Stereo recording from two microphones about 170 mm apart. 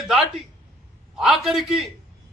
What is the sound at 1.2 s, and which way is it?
Speech, centre (ahead or behind).